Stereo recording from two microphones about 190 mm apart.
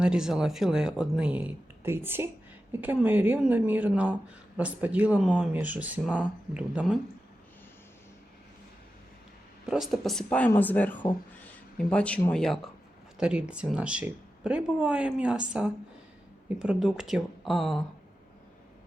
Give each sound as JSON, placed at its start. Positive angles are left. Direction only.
{"t": 0.0, "sound": "speech", "side_deg": -5}
{"t": 9.6, "sound": "speech", "side_deg": 0}